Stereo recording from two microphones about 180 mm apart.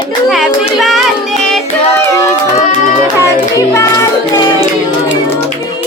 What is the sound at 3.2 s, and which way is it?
Music, 15° left (ahead or behind).